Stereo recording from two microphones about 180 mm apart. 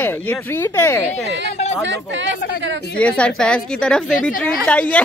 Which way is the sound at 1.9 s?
90° right.